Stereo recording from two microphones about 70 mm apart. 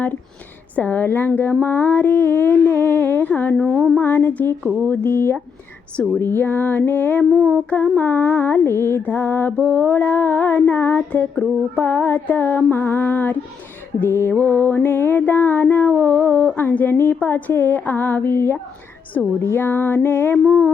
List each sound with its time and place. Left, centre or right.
0.8 s music: left
3.5 s speech: centre
3.9 s music: left
4.9 s a sound: left
6.1 s music: left
19.4 s a sound: left